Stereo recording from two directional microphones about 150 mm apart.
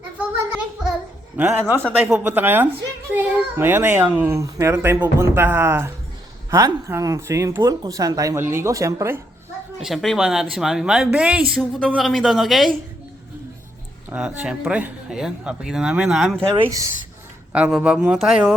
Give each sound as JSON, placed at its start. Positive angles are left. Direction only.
{"t": 1.4, "sound": "a child's voice", "side_deg": -10}
{"t": 9.8, "sound": "speech", "side_deg": 0}
{"t": 14.1, "sound": "a child's voice", "side_deg": -5}
{"t": 16.6, "sound": "speech", "side_deg": -20}
{"t": 17.5, "sound": "speech", "side_deg": -5}